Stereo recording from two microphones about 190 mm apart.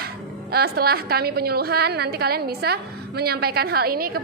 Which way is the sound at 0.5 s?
55° right (ahead or behind).